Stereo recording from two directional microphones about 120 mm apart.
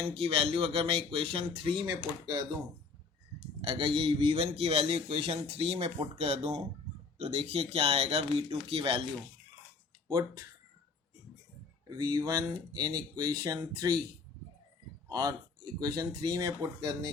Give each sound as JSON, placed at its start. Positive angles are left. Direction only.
{"t": 0.2, "sound": "speech", "side_deg": -50}
{"t": 3.6, "sound": "a man's voice", "side_deg": -50}
{"t": 10.1, "sound": "speech", "side_deg": -30}
{"t": 11.9, "sound": "speech", "side_deg": -30}
{"t": 15.1, "sound": "speech", "side_deg": -30}